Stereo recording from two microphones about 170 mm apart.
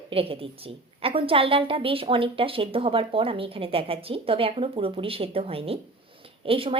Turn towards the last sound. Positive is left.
turn(degrees=-30)  # may be behind; listen again after turning